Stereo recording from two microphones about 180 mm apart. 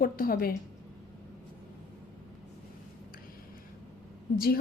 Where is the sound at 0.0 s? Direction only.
55° left (ahead or behind).